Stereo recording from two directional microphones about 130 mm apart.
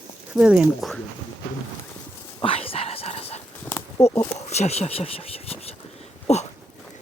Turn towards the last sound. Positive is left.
turn(degrees=55)  # may be behind; listen again after turning